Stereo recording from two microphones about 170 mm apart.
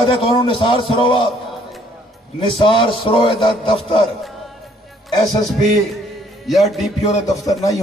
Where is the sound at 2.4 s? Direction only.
30° left (ahead or behind).